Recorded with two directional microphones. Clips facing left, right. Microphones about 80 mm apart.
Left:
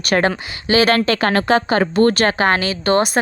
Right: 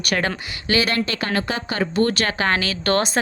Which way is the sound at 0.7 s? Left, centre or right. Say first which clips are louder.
Left 6 dB; centre.